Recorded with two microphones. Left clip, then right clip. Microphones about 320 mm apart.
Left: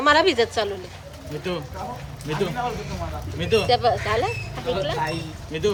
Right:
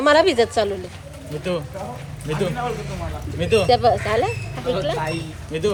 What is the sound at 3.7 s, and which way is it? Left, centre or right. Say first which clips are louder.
Speech: right 3 dB; centre.